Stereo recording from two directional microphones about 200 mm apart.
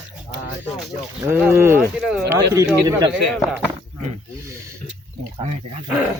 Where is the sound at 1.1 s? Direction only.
10° right (ahead or behind).